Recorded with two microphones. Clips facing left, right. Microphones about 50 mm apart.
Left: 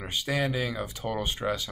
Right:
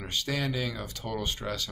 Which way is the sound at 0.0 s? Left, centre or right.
Centre.